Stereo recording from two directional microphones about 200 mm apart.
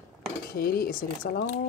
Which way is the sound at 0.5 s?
50° left (ahead or behind).